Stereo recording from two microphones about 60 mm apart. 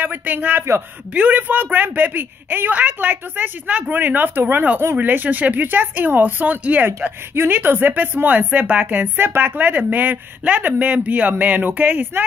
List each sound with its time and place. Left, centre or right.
0.0 s a woman's voice: right